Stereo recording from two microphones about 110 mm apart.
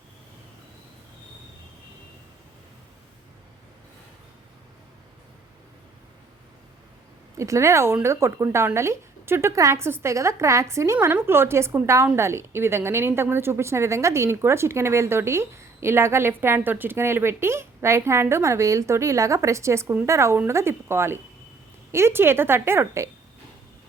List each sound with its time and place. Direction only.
7.3 s a woman's voice: 25° right (ahead or behind)